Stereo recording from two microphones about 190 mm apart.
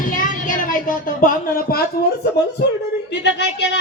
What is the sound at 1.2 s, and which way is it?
Speech, 55° left (ahead or behind).